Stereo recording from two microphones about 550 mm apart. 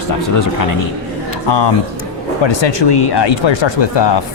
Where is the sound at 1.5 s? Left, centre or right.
Left.